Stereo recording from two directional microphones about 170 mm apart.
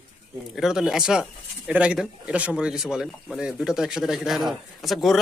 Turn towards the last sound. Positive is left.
turn(degrees=0)  # may be behind; listen again after turning